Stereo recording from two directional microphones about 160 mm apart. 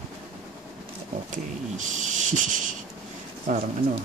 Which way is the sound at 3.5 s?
50° right (ahead or behind).